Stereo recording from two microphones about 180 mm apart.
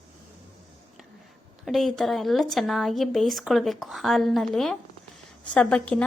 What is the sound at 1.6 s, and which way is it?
Speech, centre (ahead or behind).